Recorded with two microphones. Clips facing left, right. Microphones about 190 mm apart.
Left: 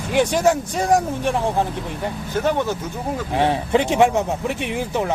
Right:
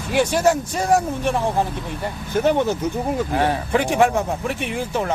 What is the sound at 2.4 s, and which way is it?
Speech, 15° right (ahead or behind).